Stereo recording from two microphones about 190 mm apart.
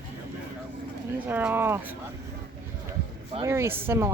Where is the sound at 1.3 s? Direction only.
10° right (ahead or behind).